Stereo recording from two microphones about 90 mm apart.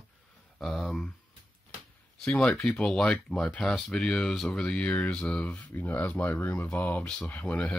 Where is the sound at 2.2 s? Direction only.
5° left (ahead or behind).